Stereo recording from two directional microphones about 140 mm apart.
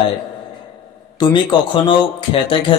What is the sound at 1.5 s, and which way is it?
Speech, 35° left (ahead or behind).